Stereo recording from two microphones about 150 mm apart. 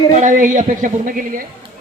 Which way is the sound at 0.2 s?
60° right (ahead or behind).